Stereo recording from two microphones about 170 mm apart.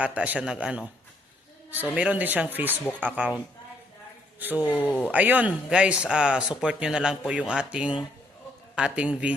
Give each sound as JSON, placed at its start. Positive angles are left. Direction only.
{"t": 0.0, "sound": "speech", "side_deg": -10}
{"t": 4.7, "sound": "speech", "side_deg": 10}
{"t": 5.0, "sound": "speech", "side_deg": -10}